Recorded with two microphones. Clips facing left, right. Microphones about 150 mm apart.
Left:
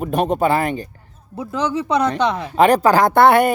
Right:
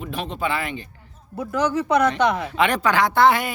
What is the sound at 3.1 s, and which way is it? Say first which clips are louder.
Speech: left 4 dB; 55° left (ahead or behind).